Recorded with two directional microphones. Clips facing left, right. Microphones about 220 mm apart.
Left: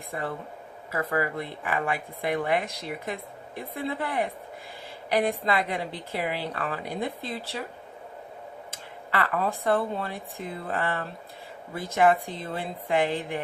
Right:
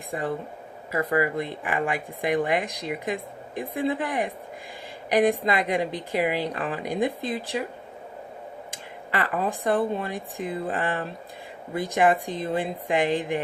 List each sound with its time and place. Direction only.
0.1 s a woman's voice: 15° right (ahead or behind)
8.7 s a woman's voice: 15° right (ahead or behind)